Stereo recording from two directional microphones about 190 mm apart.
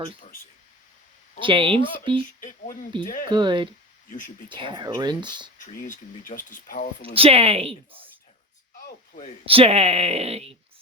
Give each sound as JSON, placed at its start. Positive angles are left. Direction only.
{"t": 1.4, "sound": "speech", "side_deg": -25}
{"t": 2.4, "sound": "speech", "side_deg": 45}
{"t": 3.2, "sound": "speech", "side_deg": -25}
{"t": 5.5, "sound": "speech", "side_deg": 45}
{"t": 7.1, "sound": "speech", "side_deg": -30}
{"t": 9.5, "sound": "speech", "side_deg": -30}